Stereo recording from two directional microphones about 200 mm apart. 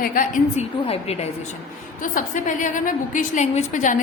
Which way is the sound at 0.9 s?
30° left (ahead or behind).